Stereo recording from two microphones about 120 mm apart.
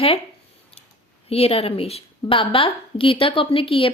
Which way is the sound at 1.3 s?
55° left (ahead or behind).